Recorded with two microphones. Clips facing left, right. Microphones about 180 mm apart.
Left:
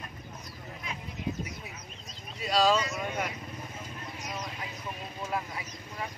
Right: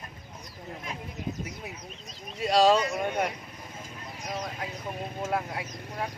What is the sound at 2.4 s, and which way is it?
Speech, 60° right (ahead or behind).